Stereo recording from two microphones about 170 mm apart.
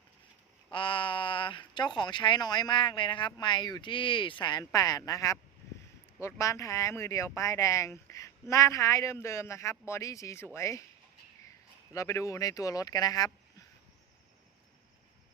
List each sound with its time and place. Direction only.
0.7 s speech: 30° left (ahead or behind)
11.9 s speech: 15° left (ahead or behind)